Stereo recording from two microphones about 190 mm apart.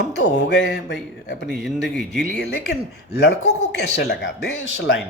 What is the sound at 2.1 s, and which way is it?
A man's voice, 65° left (ahead or behind).